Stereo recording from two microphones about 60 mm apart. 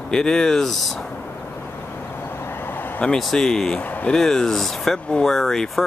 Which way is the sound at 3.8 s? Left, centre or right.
Left.